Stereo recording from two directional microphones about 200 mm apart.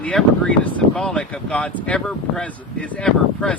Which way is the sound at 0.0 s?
5° left (ahead or behind).